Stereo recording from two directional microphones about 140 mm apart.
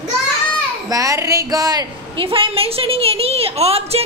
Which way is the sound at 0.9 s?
25° right (ahead or behind).